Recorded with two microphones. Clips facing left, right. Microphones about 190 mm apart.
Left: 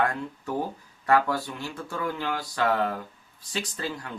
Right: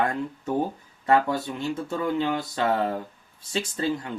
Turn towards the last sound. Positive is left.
turn(degrees=-25)  # may be behind; listen again after turning